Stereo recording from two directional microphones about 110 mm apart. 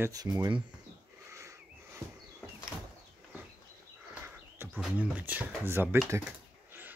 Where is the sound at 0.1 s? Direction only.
35° right (ahead or behind).